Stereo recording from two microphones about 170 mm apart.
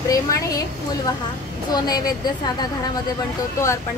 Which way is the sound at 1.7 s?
20° left (ahead or behind).